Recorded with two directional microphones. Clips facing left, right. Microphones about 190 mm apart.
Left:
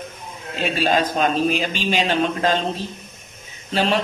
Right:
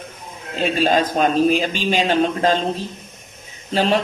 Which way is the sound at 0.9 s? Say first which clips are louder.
Even; 45° right (ahead or behind).